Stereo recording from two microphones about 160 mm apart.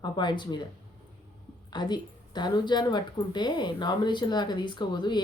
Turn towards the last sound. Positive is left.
turn(degrees=25)  # may be behind; listen again after turning